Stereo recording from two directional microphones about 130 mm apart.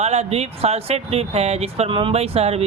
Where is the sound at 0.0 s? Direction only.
55° right (ahead or behind).